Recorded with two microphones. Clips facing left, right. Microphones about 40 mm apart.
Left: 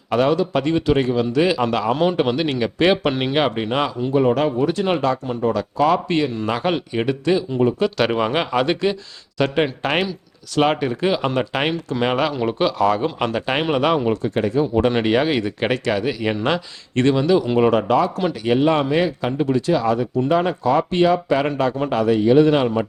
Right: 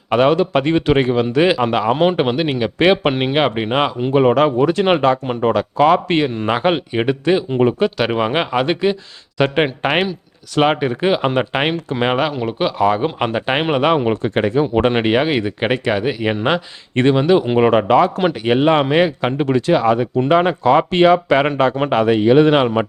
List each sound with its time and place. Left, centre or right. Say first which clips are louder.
0.1 s speech: right 4 dB; right
1.6 s speech: right 3 dB; right
2.3 s speech: right 2 dB; centre
4.0 s speech: right 4 dB; right
4.4 s speech: right 4 dB; right
4.9 s speech: right 5 dB; right
7.9 s speech: right 2 dB; centre
9.4 s speech: right 3 dB; right
14.2 s speech: right 3 dB; right
14.8 s speech: right 2 dB; right
17.9 s speech: right 5 dB; right
18.4 s speech: right 2 dB; right